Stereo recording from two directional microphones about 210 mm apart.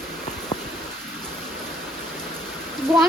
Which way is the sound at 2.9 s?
Centre (ahead or behind).